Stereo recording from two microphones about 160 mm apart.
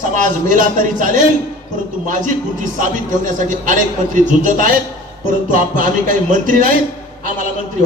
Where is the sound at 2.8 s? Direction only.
55° right (ahead or behind).